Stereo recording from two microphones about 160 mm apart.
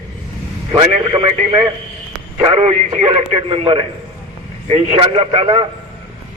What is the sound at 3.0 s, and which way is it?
A man's voice, 30° right (ahead or behind).